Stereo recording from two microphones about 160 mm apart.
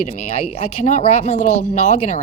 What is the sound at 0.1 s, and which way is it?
A woman's voice, 40° left (ahead or behind).